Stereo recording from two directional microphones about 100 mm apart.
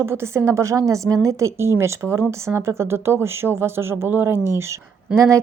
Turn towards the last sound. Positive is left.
turn(degrees=-30)  # may be behind; listen again after turning